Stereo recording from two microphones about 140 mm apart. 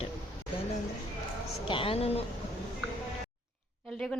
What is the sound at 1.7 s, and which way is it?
Speech, 40° left (ahead or behind).